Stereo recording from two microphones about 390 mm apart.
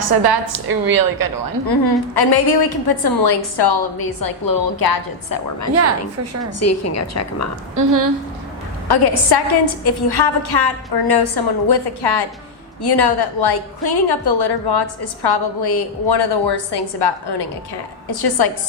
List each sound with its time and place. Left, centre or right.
0.1 s a woman's voice: right
1.6 s a woman's voice: left
6.6 s a woman's voice: left
7.8 s a woman's voice: right
8.9 s a woman's voice: left
18.1 s a woman's voice: left